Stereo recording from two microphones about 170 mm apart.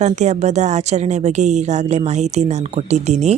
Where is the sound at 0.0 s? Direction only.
45° right (ahead or behind).